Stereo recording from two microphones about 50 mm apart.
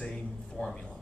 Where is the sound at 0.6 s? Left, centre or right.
Left.